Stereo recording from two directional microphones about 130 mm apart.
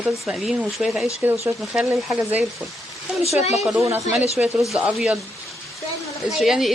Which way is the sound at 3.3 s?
60° left (ahead or behind).